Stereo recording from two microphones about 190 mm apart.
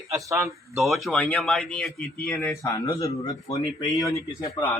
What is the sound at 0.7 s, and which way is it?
A man's voice, centre (ahead or behind).